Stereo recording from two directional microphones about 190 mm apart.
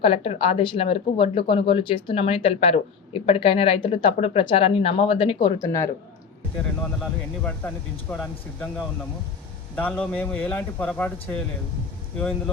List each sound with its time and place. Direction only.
0.0 s speech: 30° left (ahead or behind)
5.5 s speech: 15° left (ahead or behind)